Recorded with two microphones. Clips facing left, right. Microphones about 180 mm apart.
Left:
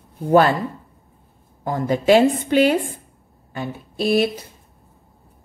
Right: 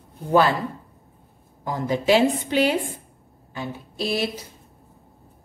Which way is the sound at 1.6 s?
50° left (ahead or behind).